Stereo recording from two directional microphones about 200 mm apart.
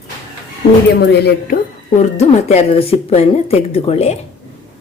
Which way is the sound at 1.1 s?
55° left (ahead or behind).